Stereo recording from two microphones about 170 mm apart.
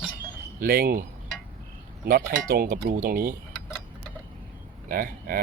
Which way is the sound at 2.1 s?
55° right (ahead or behind).